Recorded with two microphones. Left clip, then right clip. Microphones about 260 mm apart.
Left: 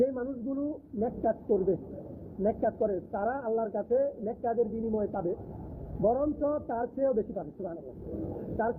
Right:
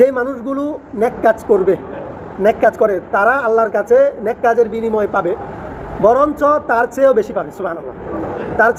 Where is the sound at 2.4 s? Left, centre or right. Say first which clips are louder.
Right 17 dB; centre.